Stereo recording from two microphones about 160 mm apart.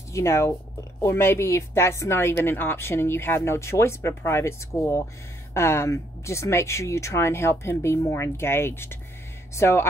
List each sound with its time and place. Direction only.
0.1 s speech: 15° left (ahead or behind)